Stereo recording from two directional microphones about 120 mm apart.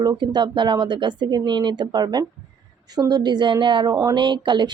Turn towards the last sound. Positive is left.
turn(degrees=-40)  # may be behind; listen again after turning